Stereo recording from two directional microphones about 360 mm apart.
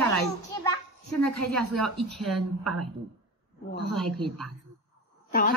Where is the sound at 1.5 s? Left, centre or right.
Centre.